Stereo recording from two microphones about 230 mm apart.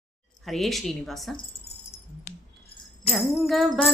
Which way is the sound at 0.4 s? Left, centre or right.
Centre.